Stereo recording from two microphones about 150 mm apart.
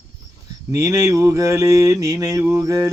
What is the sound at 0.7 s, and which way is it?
Mantra, 20° right (ahead or behind).